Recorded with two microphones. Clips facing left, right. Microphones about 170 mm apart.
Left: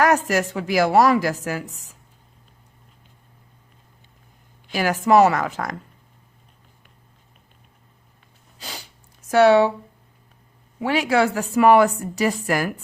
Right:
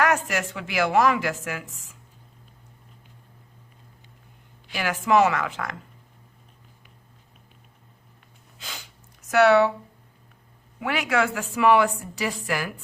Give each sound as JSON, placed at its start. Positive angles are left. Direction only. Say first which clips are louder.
{"t": 0.0, "sound": "a woman's voice", "louder": "left 5 dB", "side_deg": 40}
{"t": 4.7, "sound": "a woman's voice", "louder": "left 5 dB", "side_deg": 40}
{"t": 8.5, "sound": "a sound", "louder": "left 4 dB", "side_deg": 35}
{"t": 9.3, "sound": "a woman's voice", "louder": "left 3 dB", "side_deg": 30}
{"t": 10.8, "sound": "a woman's voice", "louder": "left 5 dB", "side_deg": 30}